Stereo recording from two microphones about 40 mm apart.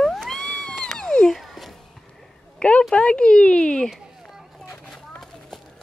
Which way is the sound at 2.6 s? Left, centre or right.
Left.